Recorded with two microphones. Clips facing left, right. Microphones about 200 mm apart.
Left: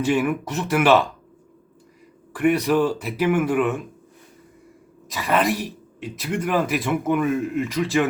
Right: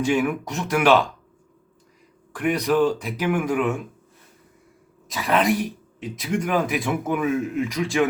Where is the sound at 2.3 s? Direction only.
5° left (ahead or behind).